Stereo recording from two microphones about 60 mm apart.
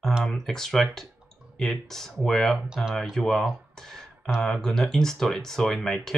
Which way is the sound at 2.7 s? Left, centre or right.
Centre.